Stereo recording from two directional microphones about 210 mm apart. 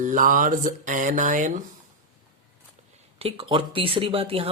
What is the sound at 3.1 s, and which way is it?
Speech, 30° right (ahead or behind).